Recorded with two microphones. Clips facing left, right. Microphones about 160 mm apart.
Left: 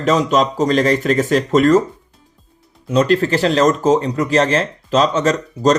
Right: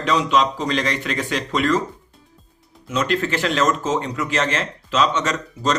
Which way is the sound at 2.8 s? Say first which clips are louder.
Left 7 dB; 35° left (ahead or behind).